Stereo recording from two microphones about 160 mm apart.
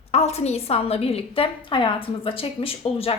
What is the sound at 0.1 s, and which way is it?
A woman's voice, 40° left (ahead or behind).